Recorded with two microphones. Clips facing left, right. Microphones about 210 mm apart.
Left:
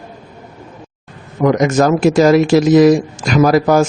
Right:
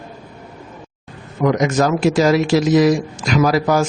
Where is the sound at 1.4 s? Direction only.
50° left (ahead or behind).